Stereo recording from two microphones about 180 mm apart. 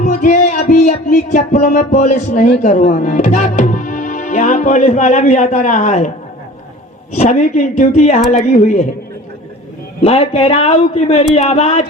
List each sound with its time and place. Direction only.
0.0 s music: 45° left (ahead or behind)
2.6 s speech: 45° left (ahead or behind)
7.2 s a man's voice: 40° left (ahead or behind)
10.0 s a man's voice: 35° left (ahead or behind)